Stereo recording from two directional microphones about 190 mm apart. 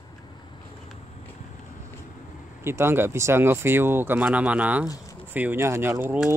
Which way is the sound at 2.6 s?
10° right (ahead or behind).